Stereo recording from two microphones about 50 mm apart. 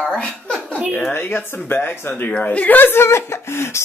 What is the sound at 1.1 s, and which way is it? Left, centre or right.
Speech, left.